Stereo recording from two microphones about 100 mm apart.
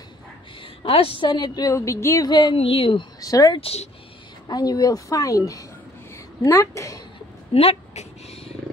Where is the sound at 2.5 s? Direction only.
65° left (ahead or behind).